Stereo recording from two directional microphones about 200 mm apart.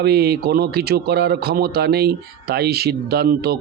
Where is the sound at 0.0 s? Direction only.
50° right (ahead or behind).